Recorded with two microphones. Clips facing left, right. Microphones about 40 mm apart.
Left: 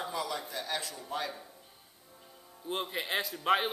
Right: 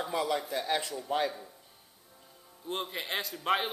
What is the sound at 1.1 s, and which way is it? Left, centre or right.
Speech, right.